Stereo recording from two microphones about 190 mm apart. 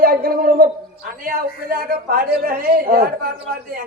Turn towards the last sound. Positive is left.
turn(degrees=-50)  # may be behind; listen again after turning